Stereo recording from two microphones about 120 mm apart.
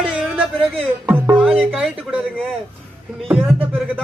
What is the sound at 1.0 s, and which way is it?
Music, 10° right (ahead or behind).